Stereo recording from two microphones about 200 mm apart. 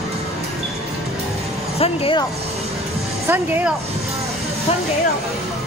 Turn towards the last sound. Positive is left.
turn(degrees=-5)  # may be behind; listen again after turning